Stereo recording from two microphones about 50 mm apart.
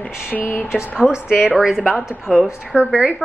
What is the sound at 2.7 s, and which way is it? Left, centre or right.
Speech, right.